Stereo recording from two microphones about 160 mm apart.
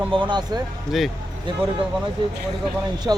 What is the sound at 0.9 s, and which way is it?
Speech, centre (ahead or behind).